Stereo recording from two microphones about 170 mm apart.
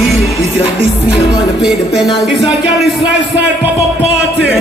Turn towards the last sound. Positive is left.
turn(degrees=-90)